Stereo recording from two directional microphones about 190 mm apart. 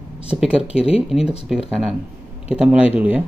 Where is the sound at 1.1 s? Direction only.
Centre (ahead or behind).